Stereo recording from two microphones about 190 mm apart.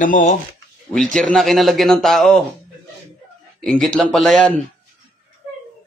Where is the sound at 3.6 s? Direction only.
5° left (ahead or behind).